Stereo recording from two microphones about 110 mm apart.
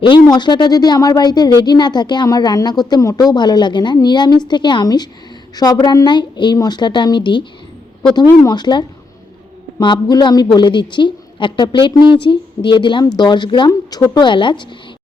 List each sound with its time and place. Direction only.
0.0 s a woman's voice: 45° left (ahead or behind)
8.3 s a woman's voice: 35° left (ahead or behind)
9.8 s a woman's voice: 45° left (ahead or behind)
13.7 s a woman's voice: 35° left (ahead or behind)